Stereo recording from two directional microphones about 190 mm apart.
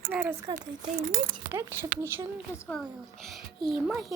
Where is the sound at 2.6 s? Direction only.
5° left (ahead or behind).